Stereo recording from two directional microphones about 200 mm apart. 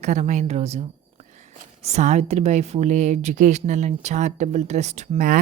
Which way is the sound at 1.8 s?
35° right (ahead or behind).